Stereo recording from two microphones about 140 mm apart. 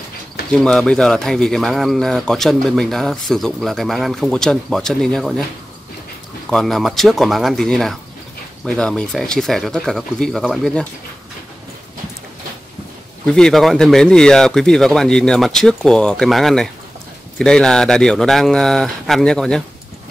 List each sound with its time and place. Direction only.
0.5 s speech: 5° left (ahead or behind)
6.5 s speech: centre (ahead or behind)
13.3 s speech: 5° left (ahead or behind)